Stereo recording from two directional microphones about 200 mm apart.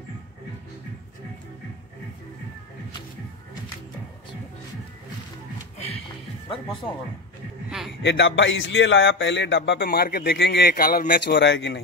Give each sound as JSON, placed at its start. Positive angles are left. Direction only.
{"t": 8.0, "sound": "speech", "side_deg": 65}